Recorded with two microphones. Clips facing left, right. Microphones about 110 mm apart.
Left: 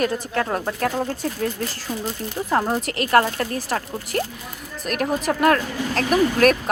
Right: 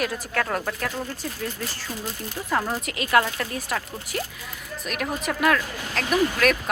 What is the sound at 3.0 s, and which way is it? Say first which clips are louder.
Speech: left 3 dB; 45° left (ahead or behind).